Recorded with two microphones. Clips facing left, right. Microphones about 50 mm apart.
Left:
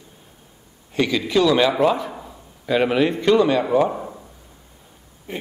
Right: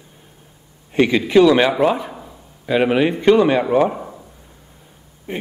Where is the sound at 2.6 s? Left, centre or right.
Centre.